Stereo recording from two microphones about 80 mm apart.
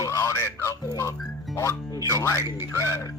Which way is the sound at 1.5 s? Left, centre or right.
Left.